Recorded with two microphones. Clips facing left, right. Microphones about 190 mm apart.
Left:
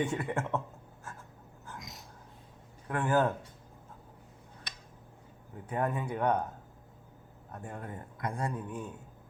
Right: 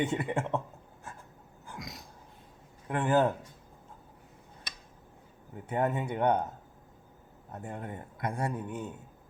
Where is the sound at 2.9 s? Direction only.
20° right (ahead or behind).